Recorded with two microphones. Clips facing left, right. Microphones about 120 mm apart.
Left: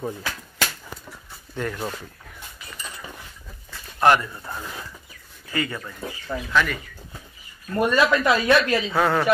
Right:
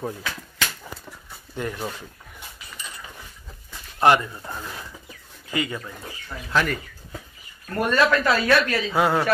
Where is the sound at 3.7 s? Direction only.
20° right (ahead or behind).